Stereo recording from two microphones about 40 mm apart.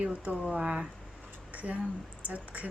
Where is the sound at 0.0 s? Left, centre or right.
Right.